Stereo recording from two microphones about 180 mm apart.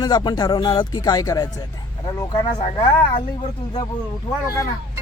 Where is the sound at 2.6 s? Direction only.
30° left (ahead or behind).